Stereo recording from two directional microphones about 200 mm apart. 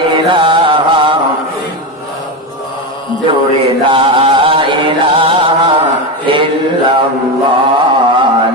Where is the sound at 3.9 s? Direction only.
25° right (ahead or behind).